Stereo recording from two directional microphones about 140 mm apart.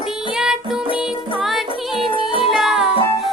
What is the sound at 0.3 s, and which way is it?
Music, 5° right (ahead or behind).